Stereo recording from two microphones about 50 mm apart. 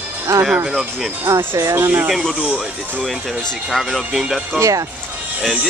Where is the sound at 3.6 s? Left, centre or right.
Centre.